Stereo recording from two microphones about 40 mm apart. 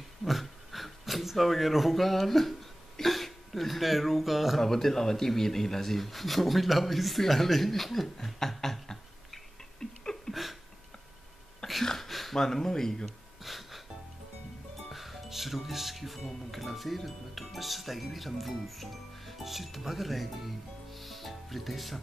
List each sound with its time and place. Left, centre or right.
0.2 s speech: centre
4.6 s speech: centre
10.3 s a sound: centre
11.8 s a sound: centre
13.4 s music: centre
14.9 s music: centre
16.5 s speech: centre